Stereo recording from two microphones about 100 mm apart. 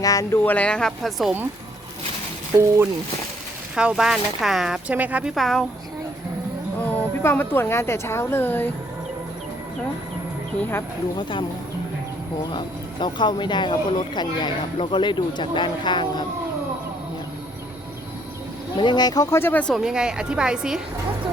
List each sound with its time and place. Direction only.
0.0 s speech: 35° left (ahead or behind)
0.4 s speech: 15° left (ahead or behind)
2.6 s speech: 25° right (ahead or behind)
3.8 s a woman's voice: 5° right (ahead or behind)
5.3 s speech: centre (ahead or behind)
6.8 s a woman's voice: 20° left (ahead or behind)
10.6 s a woman's voice: 25° left (ahead or behind)
11.2 s speech: 55° left (ahead or behind)
12.5 s speech: 50° left (ahead or behind)
18.8 s speech: 45° left (ahead or behind); by 19.6 s 20° left (ahead or behind)
19.8 s a woman's voice: 5° right (ahead or behind)